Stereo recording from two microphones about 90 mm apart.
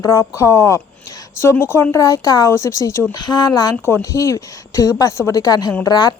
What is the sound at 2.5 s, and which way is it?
Speech, 35° left (ahead or behind).